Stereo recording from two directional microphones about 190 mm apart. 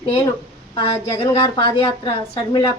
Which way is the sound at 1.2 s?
25° left (ahead or behind).